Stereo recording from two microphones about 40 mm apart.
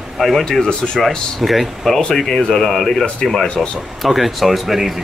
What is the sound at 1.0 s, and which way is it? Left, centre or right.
Speech, centre.